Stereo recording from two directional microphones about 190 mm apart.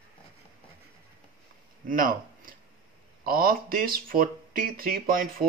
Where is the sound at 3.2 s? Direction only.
50° right (ahead or behind).